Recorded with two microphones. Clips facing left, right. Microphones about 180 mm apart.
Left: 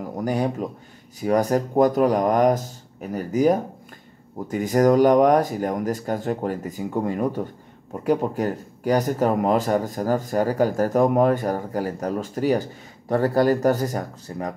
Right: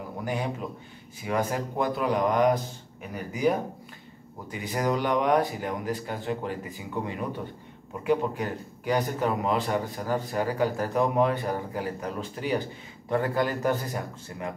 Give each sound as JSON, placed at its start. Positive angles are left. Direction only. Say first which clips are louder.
{"t": 0.0, "sound": "speech", "louder": "left 7 dB", "side_deg": 40}